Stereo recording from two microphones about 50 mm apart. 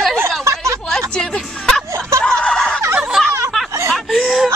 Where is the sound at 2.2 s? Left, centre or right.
Left.